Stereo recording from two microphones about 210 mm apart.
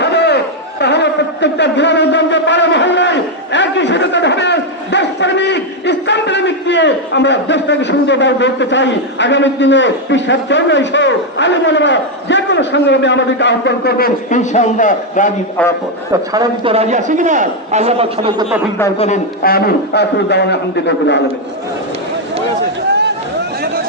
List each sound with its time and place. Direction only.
0.0 s a man's voice: 55° left (ahead or behind); by 15.3 s 35° left (ahead or behind)
15.6 s a man's voice: 5° left (ahead or behind)
16.3 s a man's voice: 20° right (ahead or behind)
18.9 s a man's voice: 30° left (ahead or behind)
19.4 s a man's voice: 45° left (ahead or behind)